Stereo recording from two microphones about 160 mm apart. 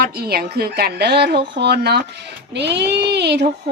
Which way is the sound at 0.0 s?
80° right.